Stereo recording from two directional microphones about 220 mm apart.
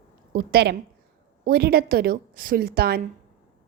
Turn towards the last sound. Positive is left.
turn(degrees=-45)  # may be behind; listen again after turning